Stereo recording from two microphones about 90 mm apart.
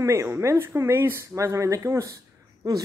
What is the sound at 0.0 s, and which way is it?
Speech, 30° right (ahead or behind).